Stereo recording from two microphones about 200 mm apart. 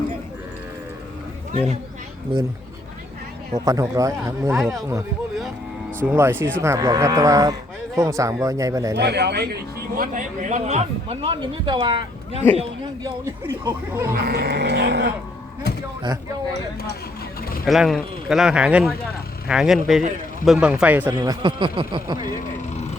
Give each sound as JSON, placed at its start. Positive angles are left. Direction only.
{"t": 3.6, "sound": "speech", "side_deg": -15}
{"t": 4.5, "sound": "a man's voice", "side_deg": 0}
{"t": 6.1, "sound": "speech", "side_deg": -10}
{"t": 9.0, "sound": "a man's voice", "side_deg": -55}
{"t": 14.1, "sound": "speech", "side_deg": -50}
{"t": 17.7, "sound": "a man's voice", "side_deg": 0}
{"t": 21.2, "sound": "speech", "side_deg": -20}